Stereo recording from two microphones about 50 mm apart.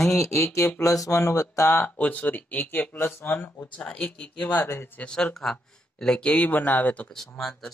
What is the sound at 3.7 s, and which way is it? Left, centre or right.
Speech, left.